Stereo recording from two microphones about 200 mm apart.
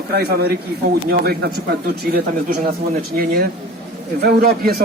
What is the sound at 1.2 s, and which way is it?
Speech, 55° right (ahead or behind).